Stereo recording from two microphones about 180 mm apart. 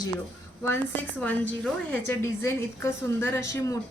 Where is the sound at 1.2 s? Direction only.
10° left (ahead or behind).